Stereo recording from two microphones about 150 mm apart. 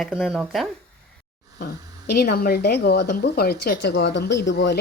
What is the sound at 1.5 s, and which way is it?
Speech, 90° left.